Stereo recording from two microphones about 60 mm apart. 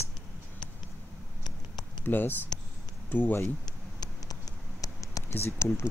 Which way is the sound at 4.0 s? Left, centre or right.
Left.